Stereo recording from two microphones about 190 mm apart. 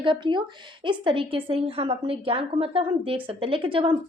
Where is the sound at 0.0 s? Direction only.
25° right (ahead or behind).